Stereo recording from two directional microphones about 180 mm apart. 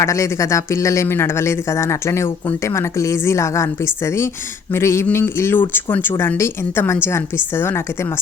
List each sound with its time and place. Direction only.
0.0 s speech: 15° left (ahead or behind)